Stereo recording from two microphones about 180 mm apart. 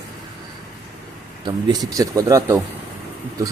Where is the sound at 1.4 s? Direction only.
20° right (ahead or behind).